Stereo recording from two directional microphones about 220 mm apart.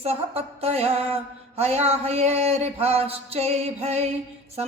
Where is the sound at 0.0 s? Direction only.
30° right (ahead or behind).